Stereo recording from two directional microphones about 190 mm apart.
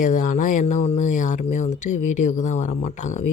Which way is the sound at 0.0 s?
40° left (ahead or behind).